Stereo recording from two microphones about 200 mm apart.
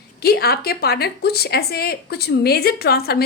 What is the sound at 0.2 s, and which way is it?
A woman's voice, 50° left (ahead or behind).